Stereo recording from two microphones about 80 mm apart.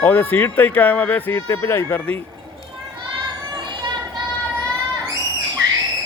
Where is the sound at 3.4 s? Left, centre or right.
Right.